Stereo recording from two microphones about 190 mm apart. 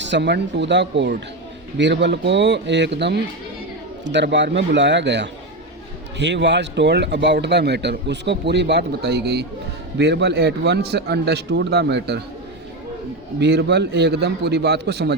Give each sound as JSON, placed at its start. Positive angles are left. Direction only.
{"t": 0.0, "sound": "a man's voice", "side_deg": -65}
{"t": 13.4, "sound": "speech", "side_deg": -60}